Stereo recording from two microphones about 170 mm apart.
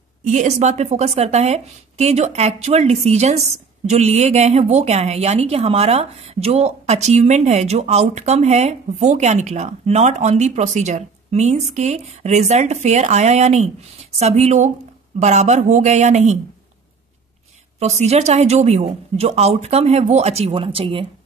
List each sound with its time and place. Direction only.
0.2 s speech: 45° right (ahead or behind)
17.7 s speech: 40° right (ahead or behind)